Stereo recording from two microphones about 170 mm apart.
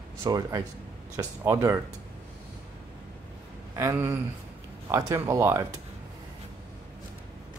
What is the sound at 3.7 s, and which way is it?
Speech, 15° right (ahead or behind).